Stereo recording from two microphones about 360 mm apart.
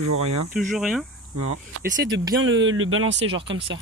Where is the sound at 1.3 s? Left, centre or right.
Right.